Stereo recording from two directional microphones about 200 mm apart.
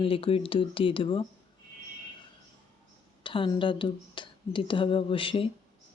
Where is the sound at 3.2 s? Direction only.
25° left (ahead or behind).